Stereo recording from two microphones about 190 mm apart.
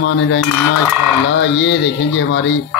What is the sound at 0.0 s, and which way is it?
Speech, 75° left (ahead or behind).